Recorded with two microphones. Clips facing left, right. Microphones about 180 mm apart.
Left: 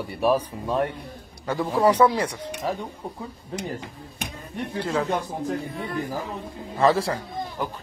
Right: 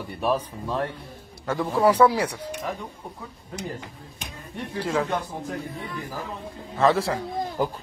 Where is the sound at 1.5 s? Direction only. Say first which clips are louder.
Even; centre (ahead or behind).